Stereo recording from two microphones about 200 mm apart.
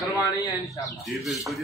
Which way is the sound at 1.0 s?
Centre (ahead or behind).